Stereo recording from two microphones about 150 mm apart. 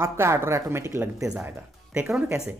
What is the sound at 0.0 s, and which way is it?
Speech, 15° right (ahead or behind).